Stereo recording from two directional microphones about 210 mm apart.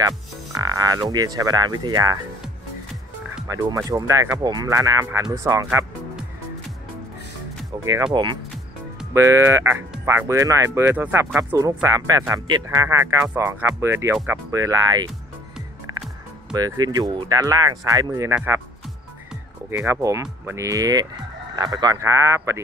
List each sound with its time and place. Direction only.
0.6 s speech: 15° right (ahead or behind)
3.4 s speech: 15° right (ahead or behind)
7.7 s speech: 15° right (ahead or behind)
16.5 s speech: 20° right (ahead or behind)
19.8 s speech: 15° right (ahead or behind)